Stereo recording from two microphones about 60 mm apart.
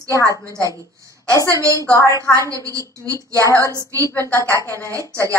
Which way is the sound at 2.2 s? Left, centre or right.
Right.